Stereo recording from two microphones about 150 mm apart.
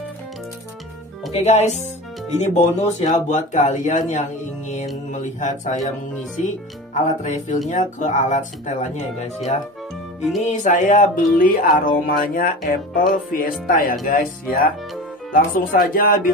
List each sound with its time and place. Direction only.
1.3 s speech: 50° left (ahead or behind)
10.4 s speech: 55° left (ahead or behind)
11.8 s music: 65° left (ahead or behind)